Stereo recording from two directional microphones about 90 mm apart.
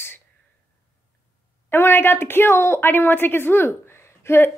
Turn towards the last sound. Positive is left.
turn(degrees=30)  # may be behind; listen again after turning